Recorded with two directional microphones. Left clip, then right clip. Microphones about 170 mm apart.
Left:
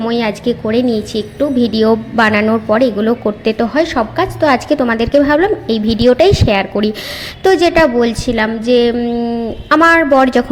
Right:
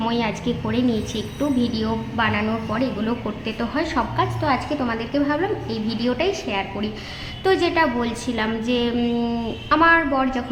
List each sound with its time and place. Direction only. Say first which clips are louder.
0.1 s a woman's voice: left 8 dB; 35° left (ahead or behind)
9.0 s speech: left 6 dB; 15° left (ahead or behind)
9.6 s a woman's voice: left 8 dB; 40° left (ahead or behind)